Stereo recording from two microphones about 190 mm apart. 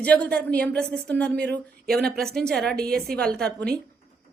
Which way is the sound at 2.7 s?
55° right (ahead or behind).